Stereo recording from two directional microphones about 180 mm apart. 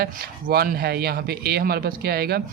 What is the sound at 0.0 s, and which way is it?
Speech, 55° right (ahead or behind).